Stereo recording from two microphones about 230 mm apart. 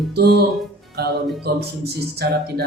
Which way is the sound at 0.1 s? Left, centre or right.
Right.